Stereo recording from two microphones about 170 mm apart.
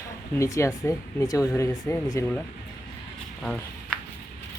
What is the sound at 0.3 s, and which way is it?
Speech, 20° left (ahead or behind).